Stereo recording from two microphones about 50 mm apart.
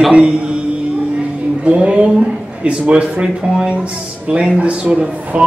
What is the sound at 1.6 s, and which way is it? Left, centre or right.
A man's voice, right.